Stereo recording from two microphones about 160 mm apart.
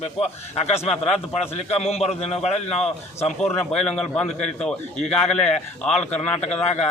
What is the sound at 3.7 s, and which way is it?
A man's voice, 5° left (ahead or behind).